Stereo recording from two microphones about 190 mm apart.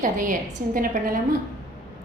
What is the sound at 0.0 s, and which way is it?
A woman's voice, 45° right (ahead or behind).